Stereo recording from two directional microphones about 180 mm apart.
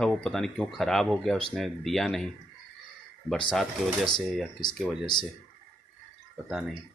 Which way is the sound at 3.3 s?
Centre (ahead or behind).